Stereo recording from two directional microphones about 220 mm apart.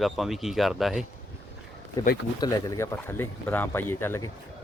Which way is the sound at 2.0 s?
15° left (ahead or behind).